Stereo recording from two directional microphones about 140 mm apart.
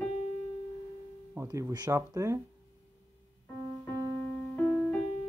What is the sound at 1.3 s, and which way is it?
Speech, 20° right (ahead or behind).